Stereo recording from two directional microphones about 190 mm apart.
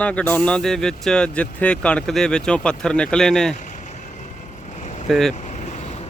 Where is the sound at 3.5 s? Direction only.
40° left (ahead or behind).